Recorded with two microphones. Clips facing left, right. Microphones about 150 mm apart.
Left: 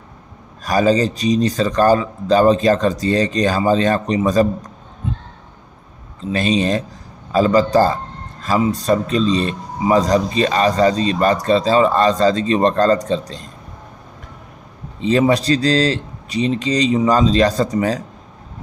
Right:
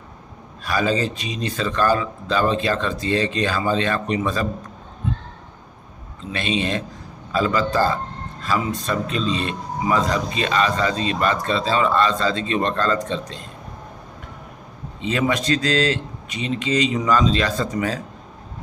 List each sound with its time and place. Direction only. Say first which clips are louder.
0.6 s speech: left 6 dB; 40° left (ahead or behind)
6.3 s speech: left 6 dB; 40° left (ahead or behind)
15.0 s speech: left 7 dB; 35° left (ahead or behind)